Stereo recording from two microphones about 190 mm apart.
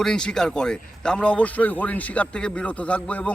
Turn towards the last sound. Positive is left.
turn(degrees=10)  # may be behind; listen again after turning